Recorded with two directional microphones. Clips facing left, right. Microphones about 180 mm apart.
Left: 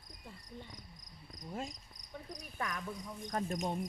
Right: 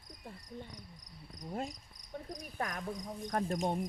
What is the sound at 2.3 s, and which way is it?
Cricket, 45° right (ahead or behind).